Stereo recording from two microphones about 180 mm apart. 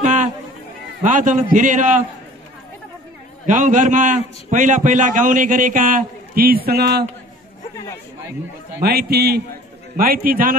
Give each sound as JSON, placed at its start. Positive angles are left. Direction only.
{"t": 0.0, "sound": "run", "side_deg": -40}
{"t": 1.0, "sound": "a man's voice", "side_deg": -45}
{"t": 3.4, "sound": "a man's voice", "side_deg": -45}
{"t": 8.8, "sound": "a man's voice", "side_deg": -60}